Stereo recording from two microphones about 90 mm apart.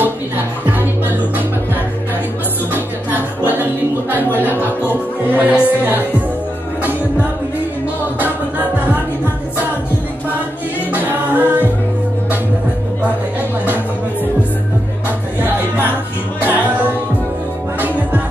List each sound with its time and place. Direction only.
0.0 s music: 20° right (ahead or behind)
2.7 s music: 20° right (ahead or behind)
10.9 s a capella: 20° right (ahead or behind)
16.4 s music: 20° right (ahead or behind)